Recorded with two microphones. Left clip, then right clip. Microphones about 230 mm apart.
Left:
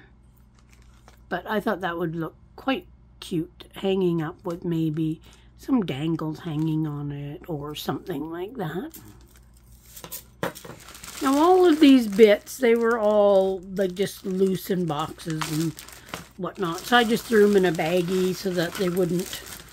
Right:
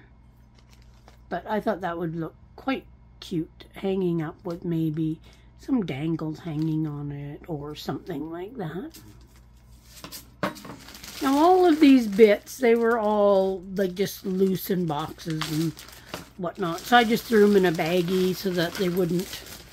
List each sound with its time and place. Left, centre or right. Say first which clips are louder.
1.0 s speech: left 2 dB; centre
11.2 s speech: left 1 dB; centre